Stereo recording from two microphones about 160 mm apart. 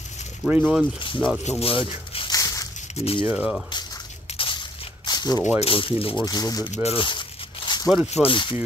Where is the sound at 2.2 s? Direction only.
20° left (ahead or behind).